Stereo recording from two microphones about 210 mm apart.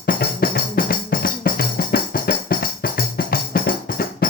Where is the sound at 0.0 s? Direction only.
45° left (ahead or behind).